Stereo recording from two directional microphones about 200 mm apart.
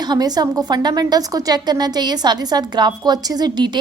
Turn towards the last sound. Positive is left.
turn(degrees=-20)  # may be behind; listen again after turning